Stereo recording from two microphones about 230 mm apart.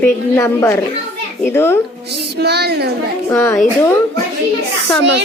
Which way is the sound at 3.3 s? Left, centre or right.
Centre.